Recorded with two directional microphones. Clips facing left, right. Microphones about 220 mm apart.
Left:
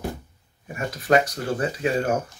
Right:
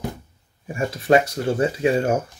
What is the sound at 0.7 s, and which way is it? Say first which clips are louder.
Speech: right 3 dB; 25° right (ahead or behind).